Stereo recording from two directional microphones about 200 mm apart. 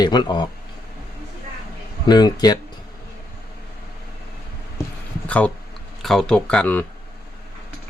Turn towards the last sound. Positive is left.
turn(degrees=5)  # may be behind; listen again after turning